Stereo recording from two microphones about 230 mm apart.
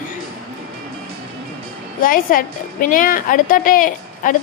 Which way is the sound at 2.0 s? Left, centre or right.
Left.